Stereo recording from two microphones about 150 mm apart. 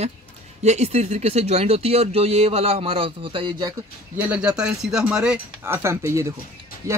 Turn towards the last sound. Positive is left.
turn(degrees=-20)  # may be behind; listen again after turning